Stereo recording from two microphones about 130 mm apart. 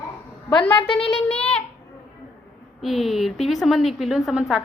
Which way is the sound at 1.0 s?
50° left (ahead or behind).